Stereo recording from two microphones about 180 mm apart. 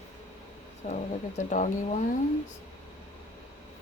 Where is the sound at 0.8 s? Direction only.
35° left (ahead or behind).